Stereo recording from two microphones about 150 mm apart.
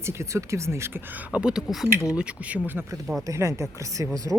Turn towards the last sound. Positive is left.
turn(degrees=-20)  # may be behind; listen again after turning